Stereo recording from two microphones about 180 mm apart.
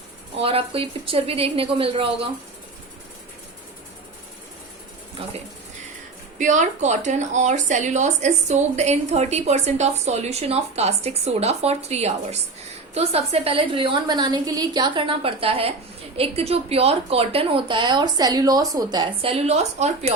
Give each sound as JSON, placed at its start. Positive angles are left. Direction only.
{"t": 0.3, "sound": "speech", "side_deg": -30}
{"t": 6.4, "sound": "a woman's voice", "side_deg": -40}